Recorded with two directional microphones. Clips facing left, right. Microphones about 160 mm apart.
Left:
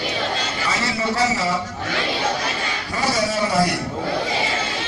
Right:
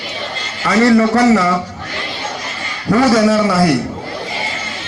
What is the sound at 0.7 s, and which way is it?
Speech, 65° right (ahead or behind).